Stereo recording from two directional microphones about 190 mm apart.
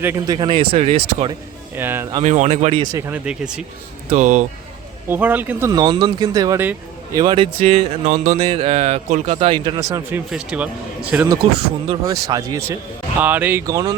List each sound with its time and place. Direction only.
0.0 s speech: 15° right (ahead or behind)
0.3 s speech: 25° right (ahead or behind)
1.7 s speech: 10° right (ahead or behind)
2.2 s speech: 40° right (ahead or behind)
2.8 s speech: 20° right (ahead or behind)
4.1 s speech: 40° right (ahead or behind)
5.0 s speech: 10° right (ahead or behind)
7.2 s speech: 25° right (ahead or behind); by 11.3 s 10° right (ahead or behind)
11.9 s speech: 20° right (ahead or behind)